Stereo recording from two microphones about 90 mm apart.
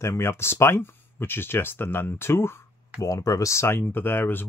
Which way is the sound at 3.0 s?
40° left (ahead or behind).